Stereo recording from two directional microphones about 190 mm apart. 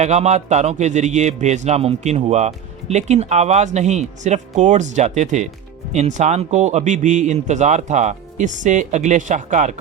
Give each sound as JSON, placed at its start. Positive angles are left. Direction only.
{"t": 0.0, "sound": "speech", "side_deg": -35}